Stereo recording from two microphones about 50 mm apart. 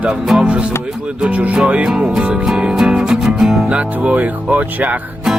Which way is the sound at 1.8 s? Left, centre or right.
Centre.